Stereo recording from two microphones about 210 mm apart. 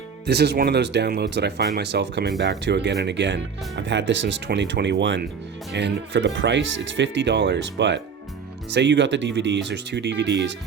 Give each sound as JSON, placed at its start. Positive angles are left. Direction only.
{"t": 0.3, "sound": "speech", "side_deg": -50}